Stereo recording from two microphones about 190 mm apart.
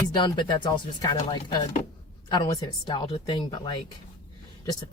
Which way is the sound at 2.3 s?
20° left (ahead or behind).